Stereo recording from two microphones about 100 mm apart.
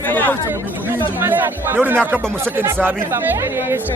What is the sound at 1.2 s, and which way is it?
Speech, 20° right (ahead or behind).